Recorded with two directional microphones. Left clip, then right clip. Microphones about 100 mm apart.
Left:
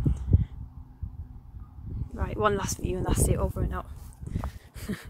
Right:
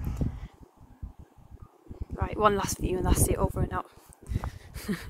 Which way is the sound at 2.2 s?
25° right (ahead or behind).